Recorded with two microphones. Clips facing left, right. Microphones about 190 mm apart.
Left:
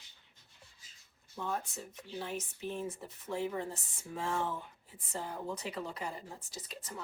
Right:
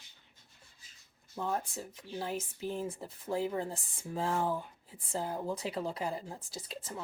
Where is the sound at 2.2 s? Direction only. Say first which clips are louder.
Right 3 dB; 35° right (ahead or behind).